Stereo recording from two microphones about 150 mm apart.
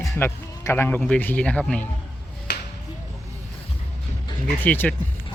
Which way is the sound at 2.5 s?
90° left.